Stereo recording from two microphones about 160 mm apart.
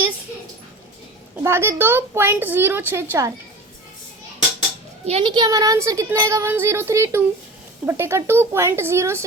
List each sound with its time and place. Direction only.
1.5 s a woman's voice: 15° right (ahead or behind)
5.0 s a woman's voice: 35° right (ahead or behind); by 9.2 s 15° right (ahead or behind)